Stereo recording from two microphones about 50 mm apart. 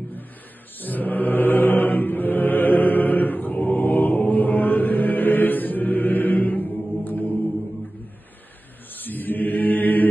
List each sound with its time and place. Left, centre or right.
0.7 s mantra: left
8.9 s chant: left